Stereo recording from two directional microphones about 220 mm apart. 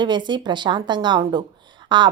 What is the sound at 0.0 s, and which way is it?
A woman's voice, 20° right (ahead or behind).